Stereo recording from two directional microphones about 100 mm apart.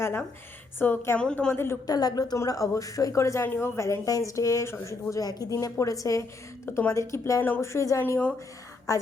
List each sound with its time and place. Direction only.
0.8 s a woman's voice: 20° left (ahead or behind)
1.2 s a woman's voice: 10° left (ahead or behind)
1.5 s a woman's voice: 25° left (ahead or behind)
1.9 s a woman's voice: 40° left (ahead or behind)